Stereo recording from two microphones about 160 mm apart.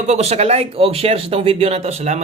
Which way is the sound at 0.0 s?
45° right (ahead or behind).